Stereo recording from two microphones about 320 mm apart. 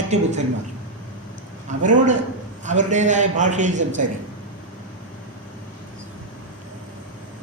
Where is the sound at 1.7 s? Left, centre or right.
Right.